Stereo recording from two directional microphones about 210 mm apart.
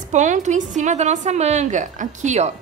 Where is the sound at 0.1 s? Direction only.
35° right (ahead or behind).